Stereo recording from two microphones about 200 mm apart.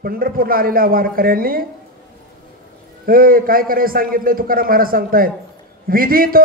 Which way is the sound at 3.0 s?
45° right (ahead or behind).